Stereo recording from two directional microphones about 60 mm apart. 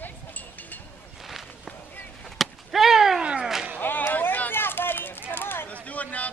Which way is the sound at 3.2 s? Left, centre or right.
Centre.